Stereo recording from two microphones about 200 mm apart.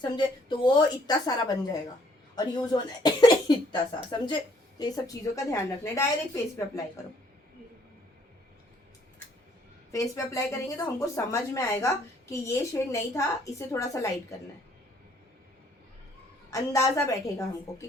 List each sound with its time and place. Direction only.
0.0 s a woman's voice: 25° left (ahead or behind)
9.9 s speech: 15° left (ahead or behind)
16.5 s speech: 15° left (ahead or behind)